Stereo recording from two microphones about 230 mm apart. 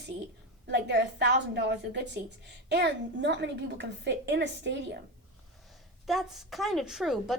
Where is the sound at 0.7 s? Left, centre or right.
Right.